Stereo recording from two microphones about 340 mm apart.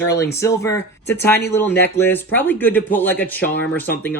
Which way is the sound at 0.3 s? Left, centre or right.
Centre.